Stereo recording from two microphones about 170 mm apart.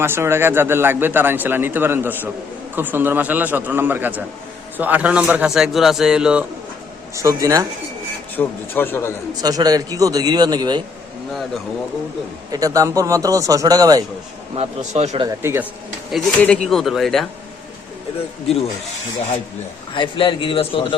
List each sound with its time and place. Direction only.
0.0 s speech: 15° right (ahead or behind)
7.2 s a man's voice: 20° right (ahead or behind)
8.4 s a man's voice: 10° left (ahead or behind)
9.3 s a man's voice: 20° right (ahead or behind)
12.5 s a man's voice: 20° right (ahead or behind)
14.5 s a man's voice: 40° right (ahead or behind)
15.4 s speech: 15° right (ahead or behind)
16.1 s speech: 5° left (ahead or behind)
19.9 s a man's voice: 30° left (ahead or behind)